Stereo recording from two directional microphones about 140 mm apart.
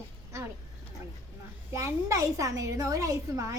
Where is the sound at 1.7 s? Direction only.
20° right (ahead or behind).